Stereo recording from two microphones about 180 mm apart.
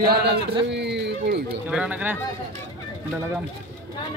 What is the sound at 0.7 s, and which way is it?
Speech, 70° right (ahead or behind).